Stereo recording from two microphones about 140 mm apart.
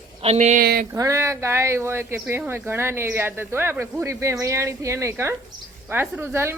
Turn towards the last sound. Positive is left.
turn(degrees=-15)  # may be behind; listen again after turning